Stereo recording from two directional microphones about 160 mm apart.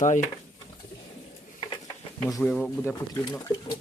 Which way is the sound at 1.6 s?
30° left (ahead or behind).